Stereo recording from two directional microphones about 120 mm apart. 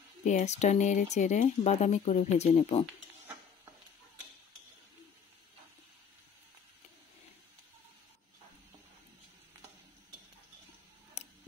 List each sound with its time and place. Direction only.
0.2 s speech: 85° left; by 2.8 s 70° left (ahead or behind)
11.2 s scissors: 65° left (ahead or behind)